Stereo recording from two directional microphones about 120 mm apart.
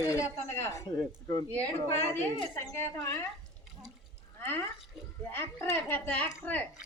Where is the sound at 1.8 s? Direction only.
20° left (ahead or behind).